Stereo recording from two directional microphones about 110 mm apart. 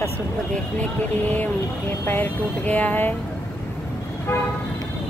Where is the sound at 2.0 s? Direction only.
15° left (ahead or behind).